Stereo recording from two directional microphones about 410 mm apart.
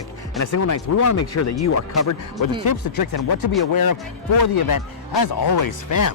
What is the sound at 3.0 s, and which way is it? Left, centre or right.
Speech, left.